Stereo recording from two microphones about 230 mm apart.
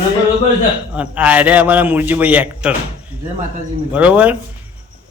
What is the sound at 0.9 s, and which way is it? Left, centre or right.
A man's voice, centre.